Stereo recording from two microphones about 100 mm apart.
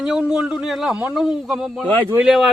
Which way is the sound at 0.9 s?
15° right (ahead or behind).